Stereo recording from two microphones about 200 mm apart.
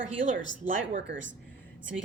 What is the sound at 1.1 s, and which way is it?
Speech, 65° right (ahead or behind).